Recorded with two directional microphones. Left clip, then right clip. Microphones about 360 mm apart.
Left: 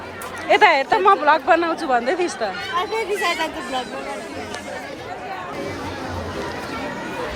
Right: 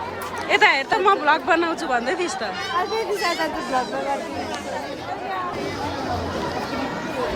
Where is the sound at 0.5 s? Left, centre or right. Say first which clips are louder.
Left 3 dB; centre.